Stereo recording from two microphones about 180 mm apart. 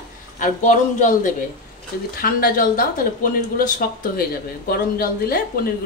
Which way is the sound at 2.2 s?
55° left (ahead or behind).